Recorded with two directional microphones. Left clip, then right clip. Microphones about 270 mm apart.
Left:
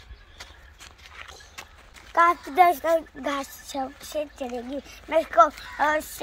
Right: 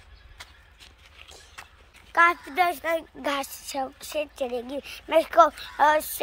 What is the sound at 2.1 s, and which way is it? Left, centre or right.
Speech, centre.